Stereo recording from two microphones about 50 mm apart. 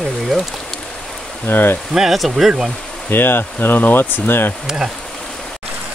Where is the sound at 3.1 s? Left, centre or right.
Left.